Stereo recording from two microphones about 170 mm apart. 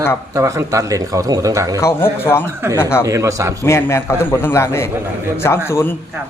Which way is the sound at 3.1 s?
20° right (ahead or behind).